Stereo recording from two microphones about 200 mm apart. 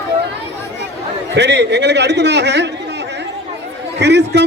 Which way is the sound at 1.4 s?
60° right (ahead or behind).